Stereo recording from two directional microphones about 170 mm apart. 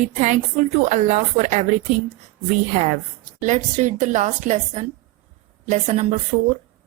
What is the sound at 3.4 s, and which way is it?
A woman's voice, 45° right (ahead or behind).